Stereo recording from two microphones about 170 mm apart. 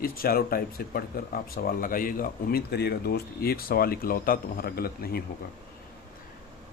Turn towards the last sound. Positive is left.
turn(degrees=65)  # may be behind; listen again after turning